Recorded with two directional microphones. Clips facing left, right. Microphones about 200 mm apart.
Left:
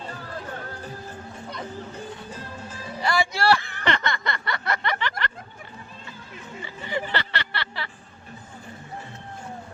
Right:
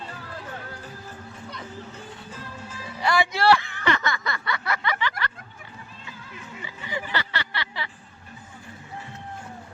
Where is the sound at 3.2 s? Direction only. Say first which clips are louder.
Right 2 dB; 20° right (ahead or behind).